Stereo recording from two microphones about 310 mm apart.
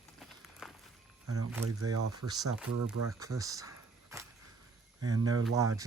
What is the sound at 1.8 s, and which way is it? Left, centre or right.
Speech, right.